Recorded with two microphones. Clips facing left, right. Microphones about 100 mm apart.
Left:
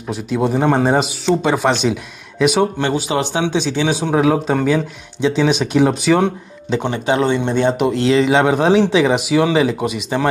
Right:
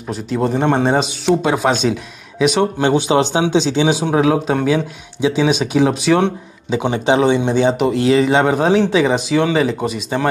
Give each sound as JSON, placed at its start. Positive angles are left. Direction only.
{"t": 0.1, "sound": "speech", "side_deg": 0}
{"t": 2.8, "sound": "speech", "side_deg": -25}
{"t": 4.0, "sound": "speech", "side_deg": -5}
{"t": 6.8, "sound": "speech", "side_deg": -15}
{"t": 7.5, "sound": "speech", "side_deg": -5}